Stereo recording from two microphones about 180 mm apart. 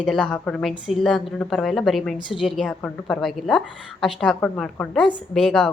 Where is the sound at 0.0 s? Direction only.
Centre (ahead or behind).